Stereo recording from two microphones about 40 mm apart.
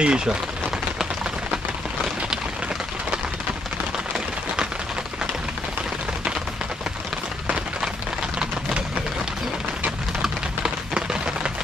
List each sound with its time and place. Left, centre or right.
0.0 s speech: right
11.0 s chopping: right